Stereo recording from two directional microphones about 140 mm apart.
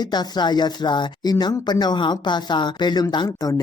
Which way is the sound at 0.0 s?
30° left (ahead or behind).